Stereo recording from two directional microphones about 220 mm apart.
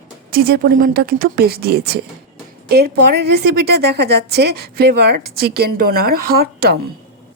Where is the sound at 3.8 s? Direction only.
50° right (ahead or behind).